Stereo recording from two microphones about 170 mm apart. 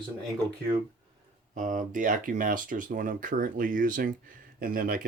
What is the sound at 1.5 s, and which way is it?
Speech, 50° right (ahead or behind).